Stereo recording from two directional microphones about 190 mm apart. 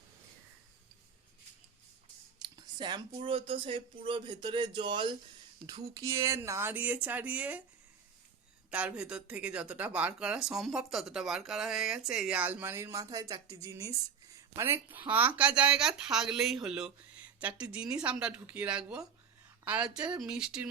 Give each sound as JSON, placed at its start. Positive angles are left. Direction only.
{"t": 2.7, "sound": "speech", "side_deg": -25}
{"t": 8.7, "sound": "speech", "side_deg": -5}